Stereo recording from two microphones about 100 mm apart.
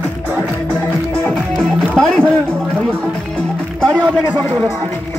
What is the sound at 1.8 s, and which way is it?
Music, 5° left (ahead or behind).